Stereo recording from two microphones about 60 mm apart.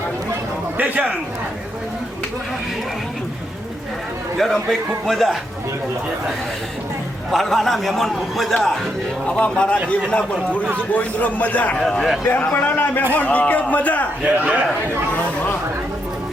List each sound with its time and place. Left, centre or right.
0.8 s a man's voice: right
4.4 s a man's voice: centre
7.3 s a man's voice: centre
9.4 s a man's voice: centre
11.8 s a man's voice: centre
12.2 s a man's voice: left
14.2 s a man's voice: right